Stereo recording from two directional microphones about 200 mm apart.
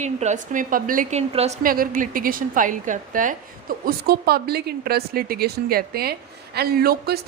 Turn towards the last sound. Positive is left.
turn(degrees=-50)  # may be behind; listen again after turning